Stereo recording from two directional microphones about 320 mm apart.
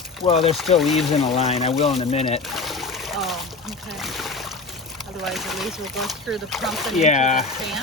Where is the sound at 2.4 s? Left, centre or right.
Centre.